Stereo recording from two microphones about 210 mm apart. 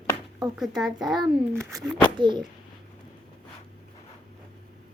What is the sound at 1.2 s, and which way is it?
Speech, 15° right (ahead or behind).